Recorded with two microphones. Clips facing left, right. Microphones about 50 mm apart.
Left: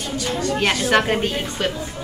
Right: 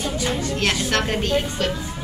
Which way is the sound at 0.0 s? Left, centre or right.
Centre.